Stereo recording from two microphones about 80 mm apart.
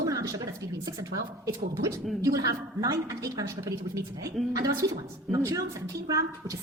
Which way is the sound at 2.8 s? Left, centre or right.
Right.